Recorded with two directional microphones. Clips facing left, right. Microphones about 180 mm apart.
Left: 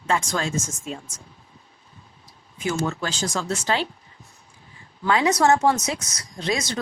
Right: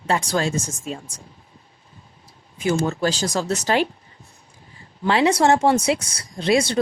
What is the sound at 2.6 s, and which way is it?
Speech, 35° right (ahead or behind).